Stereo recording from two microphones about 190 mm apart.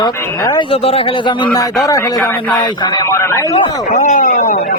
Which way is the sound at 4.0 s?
45° left (ahead or behind).